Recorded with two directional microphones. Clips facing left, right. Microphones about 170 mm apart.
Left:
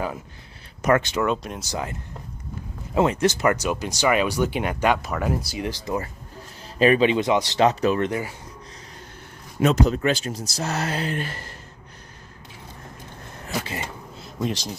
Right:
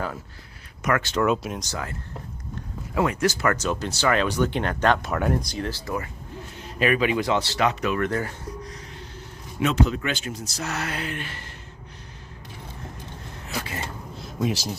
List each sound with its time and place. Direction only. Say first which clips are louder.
0.8 s speech: left 5 dB; 30° left (ahead or behind)
1.2 s speech: right 1 dB; 5° right (ahead or behind)
1.7 s speech: left 3 dB; 20° left (ahead or behind)
6.6 s speech: left 5 dB; 30° left (ahead or behind)
7.6 s speech: left 7 dB; 35° left (ahead or behind)
8.0 s speech: even; 10° left (ahead or behind)
9.6 s speech: left 3 dB; 40° left (ahead or behind)
14.2 s a sound: right 1 dB; centre (ahead or behind)